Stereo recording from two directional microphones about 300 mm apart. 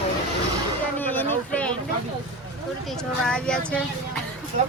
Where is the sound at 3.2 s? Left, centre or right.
Centre.